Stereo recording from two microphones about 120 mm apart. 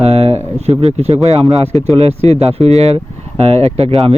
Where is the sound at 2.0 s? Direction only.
60° right (ahead or behind).